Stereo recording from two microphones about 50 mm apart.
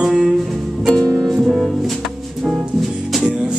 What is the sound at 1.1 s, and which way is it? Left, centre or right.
Music, centre.